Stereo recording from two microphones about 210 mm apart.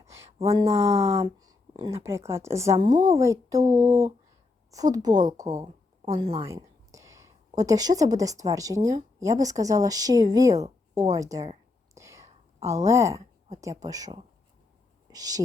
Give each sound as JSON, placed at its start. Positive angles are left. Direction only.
{"t": 0.4, "sound": "speech", "side_deg": -15}
{"t": 6.4, "sound": "speech", "side_deg": -15}
{"t": 11.9, "sound": "whispering", "side_deg": -15}
{"t": 12.6, "sound": "speech", "side_deg": -15}